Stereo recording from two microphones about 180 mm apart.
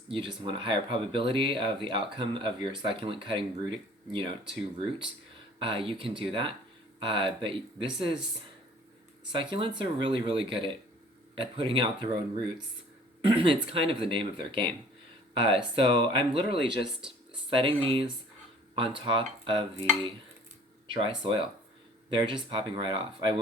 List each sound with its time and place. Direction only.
0.1 s speech: 30° right (ahead or behind)
5.5 s speech: 30° right (ahead or behind)
9.3 s speech: 30° right (ahead or behind)
13.3 s speech: 30° right (ahead or behind)
20.8 s speech: 25° right (ahead or behind)